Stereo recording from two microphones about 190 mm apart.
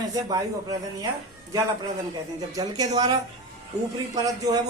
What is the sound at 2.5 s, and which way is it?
Speech, 20° right (ahead or behind).